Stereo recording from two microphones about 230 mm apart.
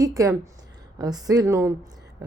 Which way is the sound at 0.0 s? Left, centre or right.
Centre.